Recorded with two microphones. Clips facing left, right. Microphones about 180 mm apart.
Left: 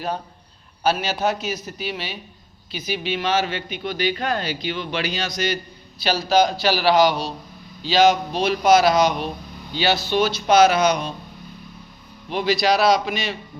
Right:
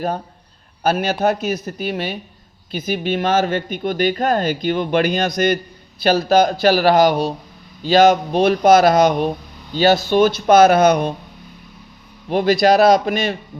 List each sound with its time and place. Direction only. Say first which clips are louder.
0.8 s a man's voice: right 4 dB; 55° right (ahead or behind)
12.3 s speech: right 6 dB; 50° right (ahead or behind)